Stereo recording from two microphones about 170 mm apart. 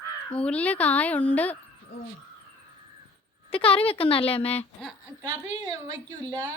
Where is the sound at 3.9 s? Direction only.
30° left (ahead or behind).